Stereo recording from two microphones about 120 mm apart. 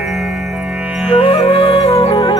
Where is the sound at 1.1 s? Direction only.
50° left (ahead or behind).